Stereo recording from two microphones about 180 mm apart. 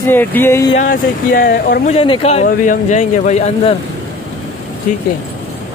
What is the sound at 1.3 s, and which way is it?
Speech, 55° left (ahead or behind).